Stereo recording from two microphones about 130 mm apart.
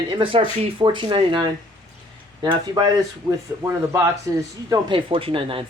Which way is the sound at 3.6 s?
20° right (ahead or behind).